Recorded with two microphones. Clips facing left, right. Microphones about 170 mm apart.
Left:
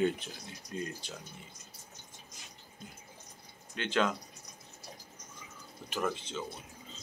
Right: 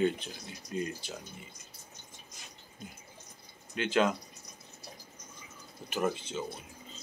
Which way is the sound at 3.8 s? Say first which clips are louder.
Right 3 dB; 5° right (ahead or behind).